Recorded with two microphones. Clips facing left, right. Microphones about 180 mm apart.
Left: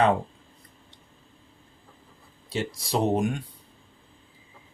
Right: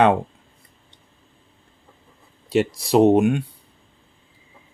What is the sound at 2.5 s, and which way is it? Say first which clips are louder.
Speech: right 10 dB; 70° right (ahead or behind).